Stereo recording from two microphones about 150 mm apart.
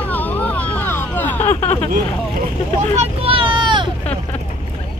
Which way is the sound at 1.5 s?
45° left (ahead or behind).